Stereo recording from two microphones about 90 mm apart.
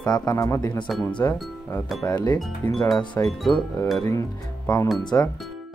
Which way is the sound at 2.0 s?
45° left (ahead or behind).